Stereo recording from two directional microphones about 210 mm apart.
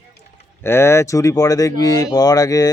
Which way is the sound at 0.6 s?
10° left (ahead or behind).